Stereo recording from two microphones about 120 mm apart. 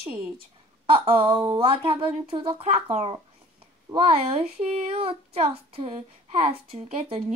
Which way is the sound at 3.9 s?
50° right (ahead or behind).